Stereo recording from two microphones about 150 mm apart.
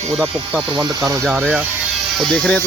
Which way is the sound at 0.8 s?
20° right (ahead or behind).